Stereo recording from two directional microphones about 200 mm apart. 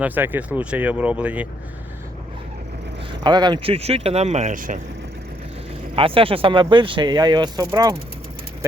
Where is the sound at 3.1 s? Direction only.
20° right (ahead or behind); by 4.8 s 40° right (ahead or behind).